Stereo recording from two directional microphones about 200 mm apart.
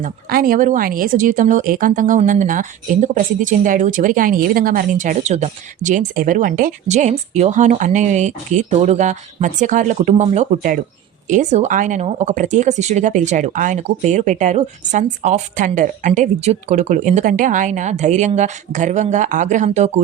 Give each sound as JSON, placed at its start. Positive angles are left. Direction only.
{"t": 0.0, "sound": "speech", "side_deg": -45}